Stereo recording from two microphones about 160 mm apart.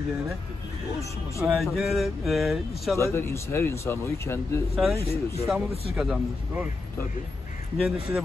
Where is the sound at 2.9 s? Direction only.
15° left (ahead or behind).